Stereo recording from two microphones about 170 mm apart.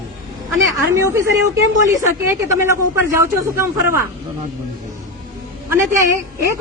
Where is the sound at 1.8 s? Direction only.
20° right (ahead or behind).